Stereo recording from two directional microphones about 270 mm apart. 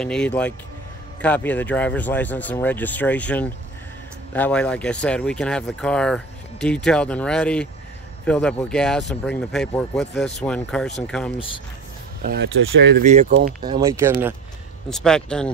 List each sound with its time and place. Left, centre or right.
0.0 s speech: centre
12.2 s speech: right
13.0 s speech: right
13.7 s speech: centre
14.9 s speech: centre